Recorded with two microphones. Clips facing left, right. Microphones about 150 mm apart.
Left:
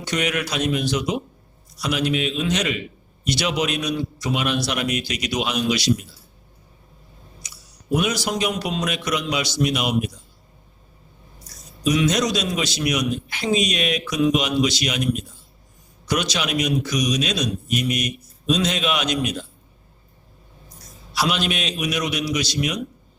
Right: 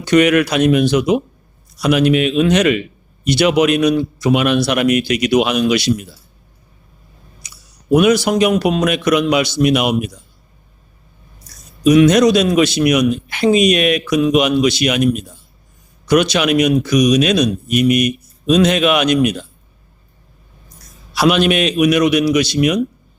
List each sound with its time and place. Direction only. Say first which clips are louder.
0.0 s a man's voice: right 13 dB; 60° right (ahead or behind)
7.4 s speech: right 9 dB; 60° right (ahead or behind)
11.8 s a man's voice: right 10 dB; 60° right (ahead or behind)
21.1 s a man's voice: right 10 dB; 65° right (ahead or behind)